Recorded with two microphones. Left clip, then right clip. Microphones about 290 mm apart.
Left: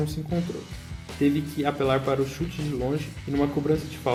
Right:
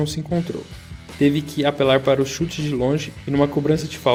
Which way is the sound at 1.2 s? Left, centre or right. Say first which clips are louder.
Right 6 dB; right.